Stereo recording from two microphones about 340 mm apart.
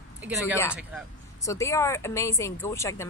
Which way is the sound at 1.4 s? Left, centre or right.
Centre.